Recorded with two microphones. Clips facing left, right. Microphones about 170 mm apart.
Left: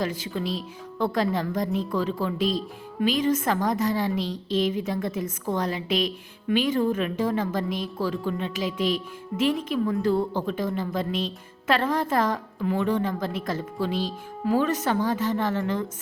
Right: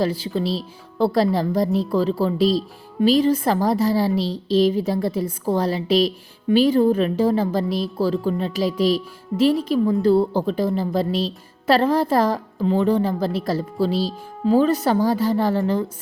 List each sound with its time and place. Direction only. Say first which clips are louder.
0.0 s a woman's voice: right 6 dB; 30° right (ahead or behind)